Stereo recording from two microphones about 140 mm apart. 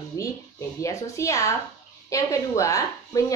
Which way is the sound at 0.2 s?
20° left (ahead or behind).